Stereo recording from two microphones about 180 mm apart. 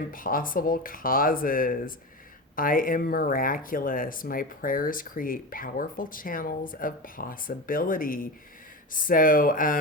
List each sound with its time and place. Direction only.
0.1 s speech: 50° left (ahead or behind)